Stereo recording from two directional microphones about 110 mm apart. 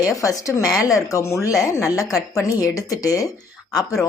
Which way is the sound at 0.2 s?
30° left (ahead or behind).